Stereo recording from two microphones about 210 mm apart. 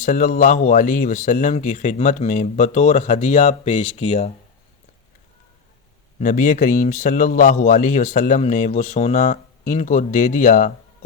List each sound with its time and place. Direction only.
0.0 s a man's voice: 35° left (ahead or behind)
6.1 s a man's voice: 40° left (ahead or behind)